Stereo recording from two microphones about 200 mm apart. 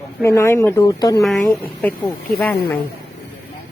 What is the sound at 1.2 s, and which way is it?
Speech, centre (ahead or behind).